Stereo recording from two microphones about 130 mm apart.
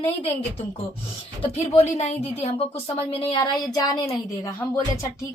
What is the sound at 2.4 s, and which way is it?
Speech, 45° left (ahead or behind).